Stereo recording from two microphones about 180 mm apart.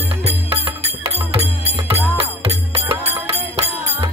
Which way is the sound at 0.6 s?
35° right (ahead or behind).